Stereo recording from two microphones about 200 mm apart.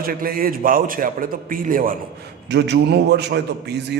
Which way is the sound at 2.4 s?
60° right (ahead or behind).